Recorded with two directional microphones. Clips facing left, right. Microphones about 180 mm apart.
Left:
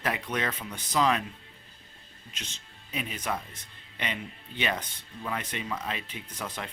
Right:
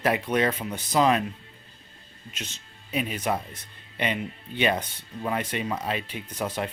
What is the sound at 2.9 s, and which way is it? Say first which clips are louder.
Speech: right 7 dB; 65° right (ahead or behind).